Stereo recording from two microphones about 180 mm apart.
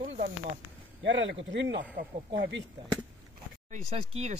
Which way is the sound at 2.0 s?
70° right (ahead or behind).